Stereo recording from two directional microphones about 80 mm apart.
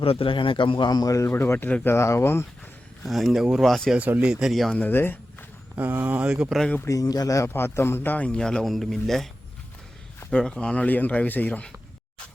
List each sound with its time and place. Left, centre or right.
0.3 s a man's voice: left
1.3 s speech: left
3.0 s a man's voice: centre
3.7 s a man's voice: centre
3.9 s speech: centre
4.7 s speech: left
5.7 s speech: right
6.3 s speech: centre
6.8 s speech: left
7.5 s speech: left
8.3 s a man's voice: centre
10.3 s speech: centre